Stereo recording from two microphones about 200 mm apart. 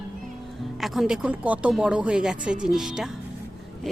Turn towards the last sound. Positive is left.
turn(degrees=0)  # may be behind; listen again after turning